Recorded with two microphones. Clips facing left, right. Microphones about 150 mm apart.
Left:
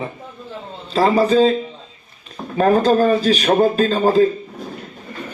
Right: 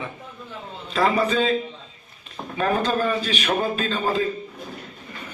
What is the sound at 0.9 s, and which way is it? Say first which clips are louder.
Speech: left 6 dB; 30° left (ahead or behind).